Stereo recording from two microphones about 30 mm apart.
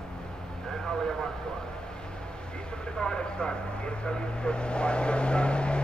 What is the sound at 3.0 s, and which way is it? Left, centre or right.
Speech, left.